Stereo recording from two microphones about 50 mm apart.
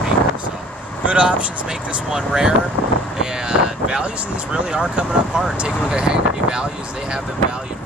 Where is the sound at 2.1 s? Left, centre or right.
Centre.